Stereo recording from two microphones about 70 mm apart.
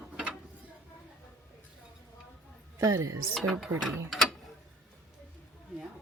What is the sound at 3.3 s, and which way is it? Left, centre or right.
Speech, centre.